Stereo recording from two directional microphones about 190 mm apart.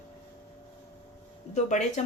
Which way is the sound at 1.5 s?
40° left (ahead or behind).